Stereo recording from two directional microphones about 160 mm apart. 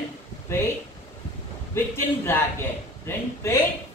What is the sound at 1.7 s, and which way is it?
A man's voice, 15° left (ahead or behind).